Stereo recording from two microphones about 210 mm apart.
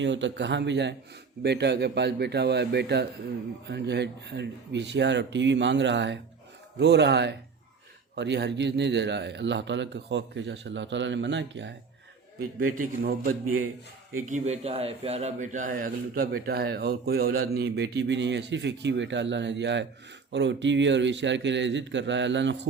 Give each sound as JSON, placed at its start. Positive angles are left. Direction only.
{"t": 0.0, "sound": "a man's voice", "side_deg": -60}
{"t": 12.4, "sound": "a man's voice", "side_deg": -40}